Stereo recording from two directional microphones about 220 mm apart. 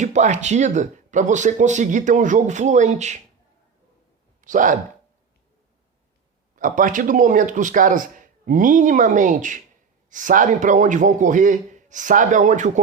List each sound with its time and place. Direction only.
0.0 s speech: 30° right (ahead or behind)
4.4 s speech: 35° right (ahead or behind)
6.6 s speech: 35° right (ahead or behind)